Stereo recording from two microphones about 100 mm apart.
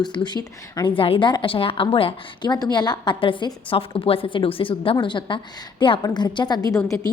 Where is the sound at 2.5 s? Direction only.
45° left (ahead or behind).